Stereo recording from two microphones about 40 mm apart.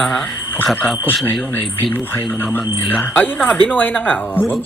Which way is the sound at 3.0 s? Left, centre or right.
Left.